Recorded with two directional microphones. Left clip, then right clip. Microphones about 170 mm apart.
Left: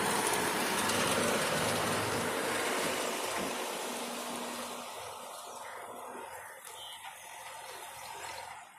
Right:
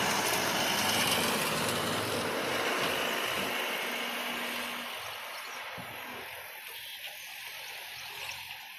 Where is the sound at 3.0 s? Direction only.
15° right (ahead or behind).